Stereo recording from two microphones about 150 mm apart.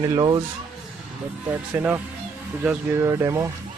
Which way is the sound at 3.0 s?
20° right (ahead or behind).